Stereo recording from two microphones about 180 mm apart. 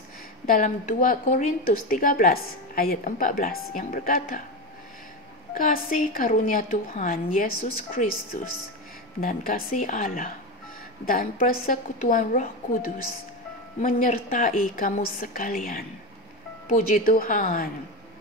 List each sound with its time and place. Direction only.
0.5 s a woman's voice: 45° left (ahead or behind)
5.5 s a woman's voice: 50° left (ahead or behind)
9.2 s a woman's voice: 50° left (ahead or behind)